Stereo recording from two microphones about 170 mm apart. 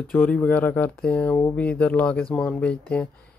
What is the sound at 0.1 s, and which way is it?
Speech, 5° left (ahead or behind).